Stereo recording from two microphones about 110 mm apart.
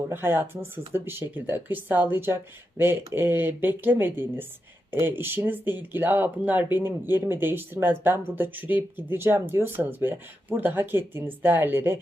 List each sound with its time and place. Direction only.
0.1 s speech: 20° right (ahead or behind)